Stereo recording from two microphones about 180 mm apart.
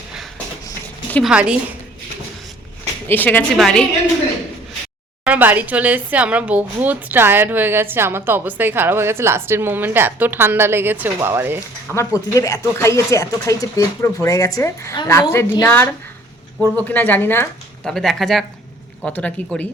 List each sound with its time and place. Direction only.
1.2 s a woman's voice: 5° right (ahead or behind)
3.1 s a woman's voice: 10° left (ahead or behind)
5.2 s a woman's voice: 10° right (ahead or behind)
11.9 s speech: 15° left (ahead or behind)